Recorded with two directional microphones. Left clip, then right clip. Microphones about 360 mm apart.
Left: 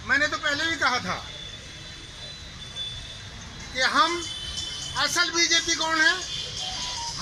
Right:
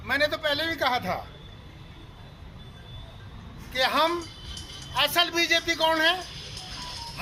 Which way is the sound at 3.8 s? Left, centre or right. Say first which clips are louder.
Left 2 dB; right.